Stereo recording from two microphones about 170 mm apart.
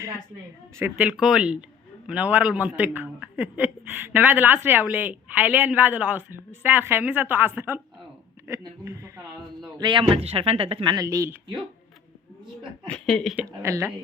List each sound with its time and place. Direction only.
0.8 s a man's voice: 10° right (ahead or behind)
9.7 s speech: 25° right (ahead or behind)
12.8 s speech: 5° left (ahead or behind)
13.3 s a man's voice: 10° right (ahead or behind)